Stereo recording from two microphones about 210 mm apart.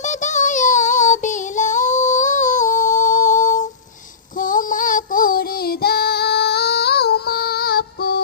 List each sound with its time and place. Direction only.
0.0 s child singing: 35° left (ahead or behind)
4.4 s female singing: 40° left (ahead or behind)